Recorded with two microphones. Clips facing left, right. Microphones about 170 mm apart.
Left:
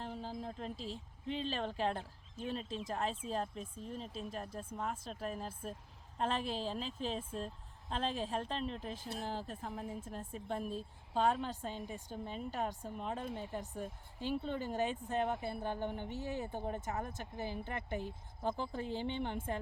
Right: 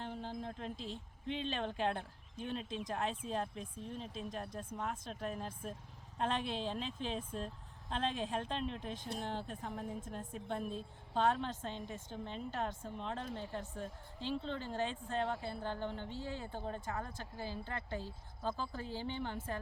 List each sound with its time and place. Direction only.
0.0 s a woman's voice: centre (ahead or behind); by 19.4 s 20° left (ahead or behind)